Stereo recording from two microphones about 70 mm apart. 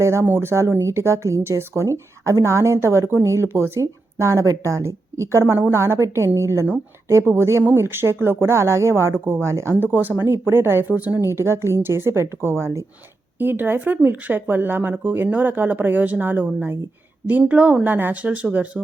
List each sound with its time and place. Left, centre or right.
0.0 s speech: right
11.2 s speech: right; by 18.8 s centre